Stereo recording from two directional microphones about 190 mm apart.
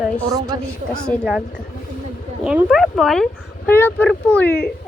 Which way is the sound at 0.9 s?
Centre (ahead or behind).